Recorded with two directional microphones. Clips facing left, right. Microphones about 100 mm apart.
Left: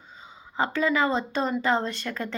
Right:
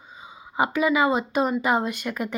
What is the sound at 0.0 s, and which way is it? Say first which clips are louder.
A woman's voice: right 3 dB; 10° right (ahead or behind).